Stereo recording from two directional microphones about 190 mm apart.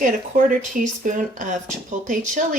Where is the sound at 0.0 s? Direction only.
45° right (ahead or behind).